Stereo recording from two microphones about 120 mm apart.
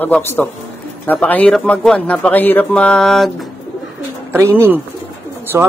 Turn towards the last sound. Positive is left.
turn(degrees=-25)  # may be behind; listen again after turning